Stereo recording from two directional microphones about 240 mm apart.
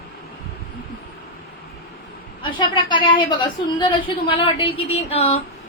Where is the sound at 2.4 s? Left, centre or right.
Centre.